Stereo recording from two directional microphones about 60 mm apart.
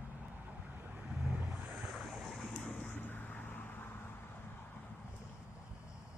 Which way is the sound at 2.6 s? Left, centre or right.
Left.